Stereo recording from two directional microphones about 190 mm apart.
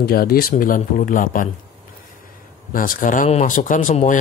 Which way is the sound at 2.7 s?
45° left (ahead or behind).